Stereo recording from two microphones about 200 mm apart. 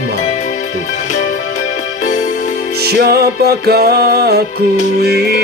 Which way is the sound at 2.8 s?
50° right (ahead or behind).